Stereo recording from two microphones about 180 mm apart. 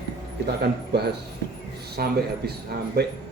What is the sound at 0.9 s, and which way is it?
A man's voice, 60° right (ahead or behind).